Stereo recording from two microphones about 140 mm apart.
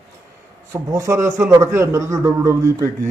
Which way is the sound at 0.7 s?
20° right (ahead or behind).